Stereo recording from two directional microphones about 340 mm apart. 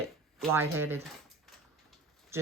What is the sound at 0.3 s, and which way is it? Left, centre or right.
Speech, centre.